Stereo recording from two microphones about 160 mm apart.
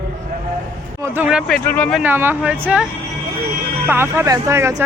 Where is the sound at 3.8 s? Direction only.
15° right (ahead or behind).